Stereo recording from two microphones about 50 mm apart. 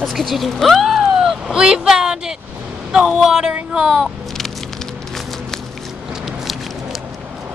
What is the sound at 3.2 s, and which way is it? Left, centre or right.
Speech, centre.